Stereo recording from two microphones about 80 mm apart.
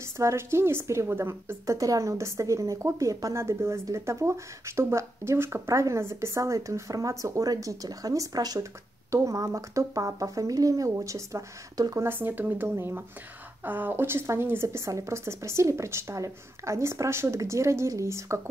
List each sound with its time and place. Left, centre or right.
0.0 s a woman's voice: right
9.1 s speech: right
12.0 s a woman's voice: right